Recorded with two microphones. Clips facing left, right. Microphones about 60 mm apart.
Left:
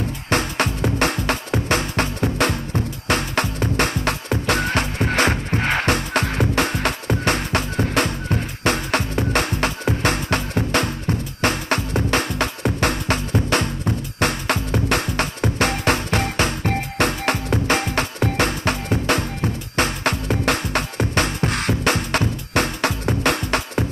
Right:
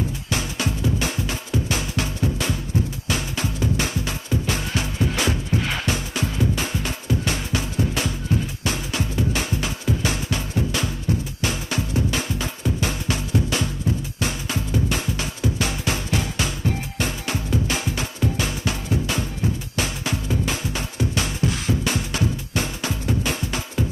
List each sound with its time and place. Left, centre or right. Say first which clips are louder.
0.3 s music: left 8 dB; left